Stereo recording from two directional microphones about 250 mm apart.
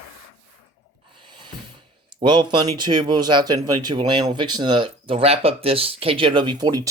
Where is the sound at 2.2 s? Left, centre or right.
Centre.